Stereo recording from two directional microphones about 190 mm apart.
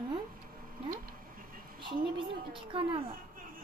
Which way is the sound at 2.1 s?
25° right (ahead or behind).